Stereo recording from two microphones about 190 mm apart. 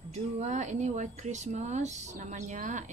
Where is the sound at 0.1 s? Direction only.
40° right (ahead or behind).